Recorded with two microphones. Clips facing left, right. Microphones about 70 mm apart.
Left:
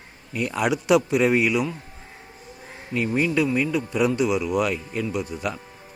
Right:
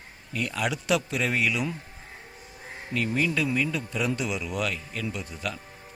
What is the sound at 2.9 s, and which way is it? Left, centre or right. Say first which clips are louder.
Speech: left 4 dB; centre.